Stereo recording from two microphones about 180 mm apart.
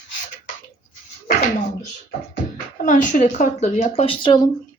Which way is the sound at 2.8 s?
45° left (ahead or behind).